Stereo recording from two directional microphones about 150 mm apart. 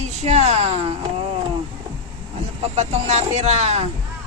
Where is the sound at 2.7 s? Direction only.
50° right (ahead or behind).